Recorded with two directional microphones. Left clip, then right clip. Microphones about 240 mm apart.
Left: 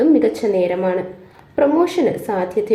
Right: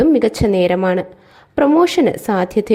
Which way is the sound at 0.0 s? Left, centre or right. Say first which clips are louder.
Right 1 dB; right.